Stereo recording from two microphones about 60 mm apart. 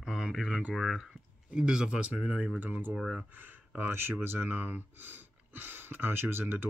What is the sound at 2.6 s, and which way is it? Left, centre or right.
Speech, right.